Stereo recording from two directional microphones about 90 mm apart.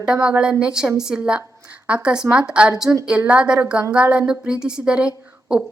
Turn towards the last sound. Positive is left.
turn(degrees=-15)  # may be behind; listen again after turning